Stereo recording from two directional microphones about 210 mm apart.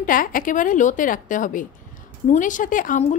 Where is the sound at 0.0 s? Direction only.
40° left (ahead or behind).